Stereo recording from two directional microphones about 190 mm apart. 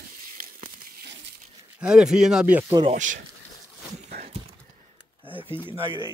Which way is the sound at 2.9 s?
40° right (ahead or behind).